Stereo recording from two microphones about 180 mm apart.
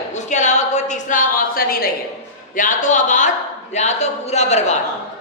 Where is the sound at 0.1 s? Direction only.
40° left (ahead or behind).